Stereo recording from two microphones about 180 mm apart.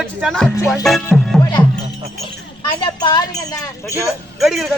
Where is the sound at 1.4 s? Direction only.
25° left (ahead or behind).